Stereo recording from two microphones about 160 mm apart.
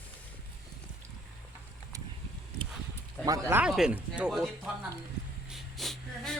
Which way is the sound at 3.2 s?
20° right (ahead or behind).